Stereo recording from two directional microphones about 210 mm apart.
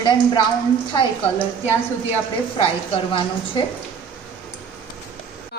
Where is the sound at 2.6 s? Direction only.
25° left (ahead or behind).